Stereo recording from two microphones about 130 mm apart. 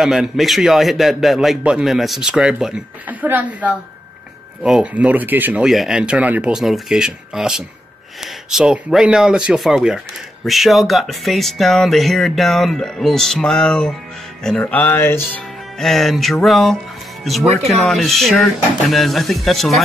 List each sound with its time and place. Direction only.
0.0 s speech: centre (ahead or behind)
5.6 s speech: 5° right (ahead or behind); by 15.4 s 15° left (ahead or behind)
15.8 s speech: centre (ahead or behind)